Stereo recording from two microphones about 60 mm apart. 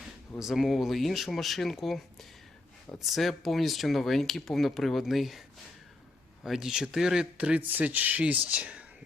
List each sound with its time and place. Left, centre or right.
0.3 s speech: centre
3.1 s speech: centre
6.4 s speech: centre
7.3 s speech: right